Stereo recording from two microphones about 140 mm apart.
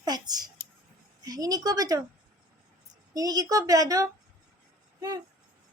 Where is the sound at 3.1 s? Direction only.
25° right (ahead or behind).